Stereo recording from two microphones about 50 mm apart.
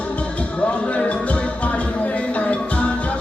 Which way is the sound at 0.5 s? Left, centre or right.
Left.